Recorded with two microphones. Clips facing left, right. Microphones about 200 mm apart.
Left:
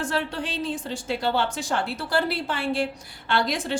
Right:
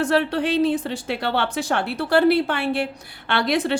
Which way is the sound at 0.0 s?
65° right (ahead or behind).